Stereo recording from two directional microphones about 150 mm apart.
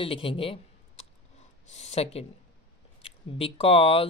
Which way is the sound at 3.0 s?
40° left (ahead or behind).